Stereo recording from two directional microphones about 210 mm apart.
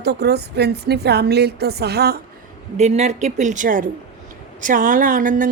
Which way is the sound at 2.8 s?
30° right (ahead or behind).